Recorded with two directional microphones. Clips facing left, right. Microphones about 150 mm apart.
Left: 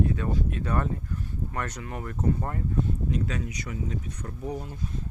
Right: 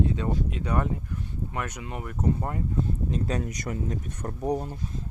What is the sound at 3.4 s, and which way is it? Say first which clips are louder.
Speech: right 3 dB; 45° right (ahead or behind).